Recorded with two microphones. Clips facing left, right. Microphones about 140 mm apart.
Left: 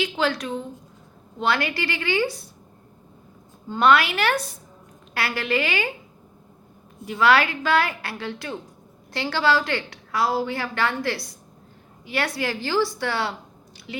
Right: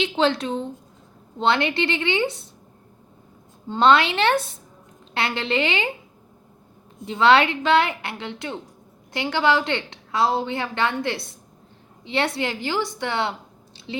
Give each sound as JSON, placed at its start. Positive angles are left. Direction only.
{"t": 0.0, "sound": "a woman's voice", "side_deg": -25}
{"t": 3.7, "sound": "a woman's voice", "side_deg": -25}
{"t": 7.0, "sound": "a woman's voice", "side_deg": -25}